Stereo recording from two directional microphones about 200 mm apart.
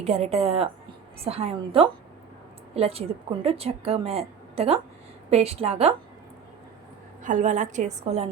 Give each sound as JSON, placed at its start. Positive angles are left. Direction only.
{"t": 0.0, "sound": "a woman's voice", "side_deg": -30}
{"t": 7.3, "sound": "a woman's voice", "side_deg": -40}